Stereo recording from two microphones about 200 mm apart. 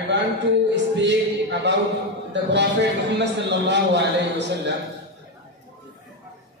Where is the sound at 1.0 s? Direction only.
60° right (ahead or behind).